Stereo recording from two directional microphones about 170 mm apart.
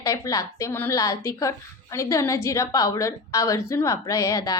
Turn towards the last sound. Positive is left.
turn(degrees=20)  # may be behind; listen again after turning